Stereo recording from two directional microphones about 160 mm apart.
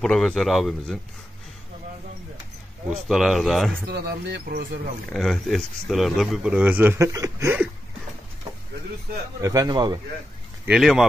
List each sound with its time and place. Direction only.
0.0 s a man's voice: 5° left (ahead or behind)
2.9 s a man's voice: centre (ahead or behind)
3.8 s speech: 80° right
5.1 s speech: centre (ahead or behind)
9.4 s a man's voice: 20° right (ahead or behind)
10.6 s a man's voice: 5° right (ahead or behind)